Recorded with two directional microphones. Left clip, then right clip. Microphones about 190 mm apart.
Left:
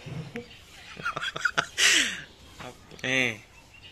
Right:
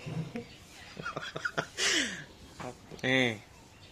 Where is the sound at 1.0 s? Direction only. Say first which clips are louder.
Left 8 dB; 10° right (ahead or behind).